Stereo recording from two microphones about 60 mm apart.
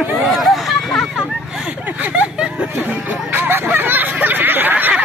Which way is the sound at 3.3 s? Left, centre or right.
Right.